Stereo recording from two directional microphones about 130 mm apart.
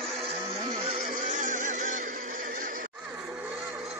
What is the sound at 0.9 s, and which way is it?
Music, 75° right (ahead or behind).